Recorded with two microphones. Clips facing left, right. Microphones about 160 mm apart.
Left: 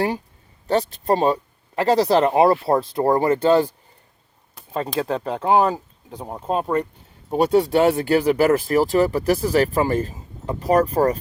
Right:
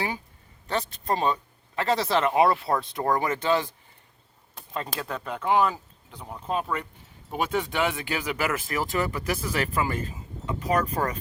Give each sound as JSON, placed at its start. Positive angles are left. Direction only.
{"t": 1.0, "sound": "speech", "side_deg": 35}
{"t": 4.7, "sound": "speech", "side_deg": 30}